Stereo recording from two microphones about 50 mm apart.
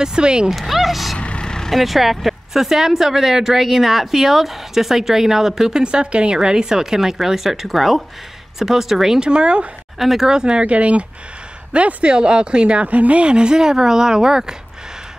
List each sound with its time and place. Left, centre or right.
0.0 s speech: centre
0.5 s speech: centre
1.1 s vehicle: centre
1.7 s speech: centre
9.3 s speech: right
9.9 s speech: centre